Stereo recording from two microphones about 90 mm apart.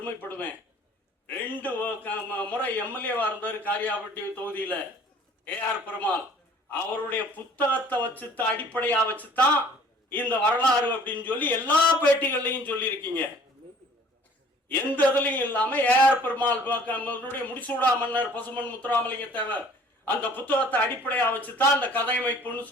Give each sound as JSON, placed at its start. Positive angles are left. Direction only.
{"t": 0.0, "sound": "a man's voice", "side_deg": 20}
{"t": 14.7, "sound": "a man's voice", "side_deg": 20}